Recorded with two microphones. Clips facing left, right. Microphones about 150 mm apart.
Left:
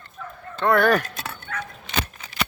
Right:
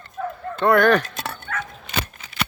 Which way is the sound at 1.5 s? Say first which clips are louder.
Right 2 dB; 60° right (ahead or behind).